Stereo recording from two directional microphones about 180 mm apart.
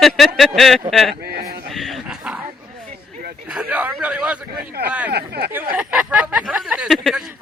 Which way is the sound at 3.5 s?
5° right (ahead or behind).